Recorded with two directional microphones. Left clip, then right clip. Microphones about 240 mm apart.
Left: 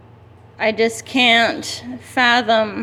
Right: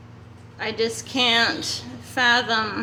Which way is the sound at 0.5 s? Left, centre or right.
Left.